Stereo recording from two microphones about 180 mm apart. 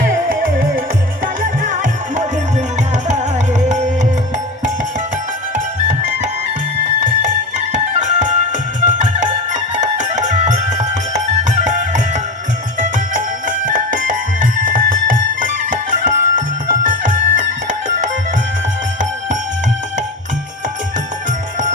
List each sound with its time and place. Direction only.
1.4 s music: 45° right (ahead or behind)
7.7 s music: 45° right (ahead or behind)
13.7 s music: 50° right (ahead or behind)